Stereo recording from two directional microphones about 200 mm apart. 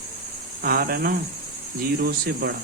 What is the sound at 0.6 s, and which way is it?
Speech, 50° right (ahead or behind).